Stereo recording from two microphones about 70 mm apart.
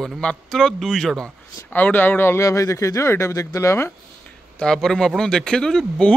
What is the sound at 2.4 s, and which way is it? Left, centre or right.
Speech, left.